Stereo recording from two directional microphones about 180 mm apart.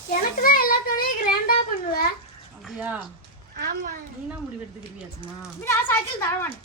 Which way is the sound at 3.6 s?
60° right (ahead or behind).